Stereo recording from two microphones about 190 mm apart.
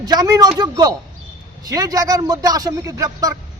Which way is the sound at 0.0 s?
20° right (ahead or behind).